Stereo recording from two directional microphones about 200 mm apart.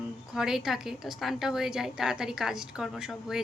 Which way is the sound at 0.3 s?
Centre (ahead or behind).